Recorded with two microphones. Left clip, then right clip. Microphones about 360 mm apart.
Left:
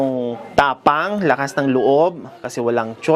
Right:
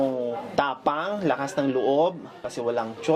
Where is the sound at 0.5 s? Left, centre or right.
Left.